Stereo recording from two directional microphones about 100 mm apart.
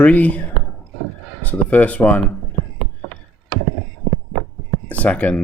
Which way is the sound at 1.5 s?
15° left (ahead or behind).